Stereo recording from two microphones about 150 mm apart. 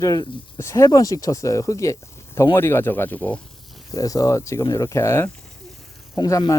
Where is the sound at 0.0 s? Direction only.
25° left (ahead or behind).